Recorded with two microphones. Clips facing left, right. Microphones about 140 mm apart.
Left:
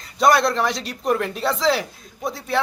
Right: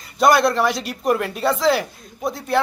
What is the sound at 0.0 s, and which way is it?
Speech, centre (ahead or behind).